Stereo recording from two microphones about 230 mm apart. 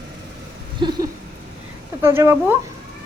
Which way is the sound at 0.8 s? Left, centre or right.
Centre.